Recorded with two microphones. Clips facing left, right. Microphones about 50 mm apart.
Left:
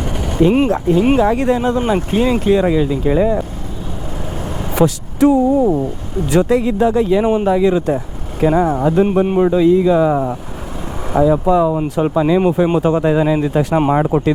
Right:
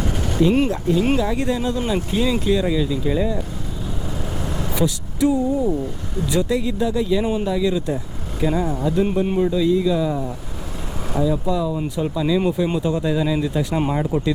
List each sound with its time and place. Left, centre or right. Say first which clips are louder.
0.2 s a sound: left 5 dB; left
0.7 s speech: left 6 dB; left
4.4 s speech: left 7 dB; left
9.0 s speech: left 6 dB; left
9.4 s speech: left 7 dB; left
13.7 s speech: left 8 dB; left